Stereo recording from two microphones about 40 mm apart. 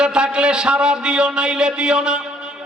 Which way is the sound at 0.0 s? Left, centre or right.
Right.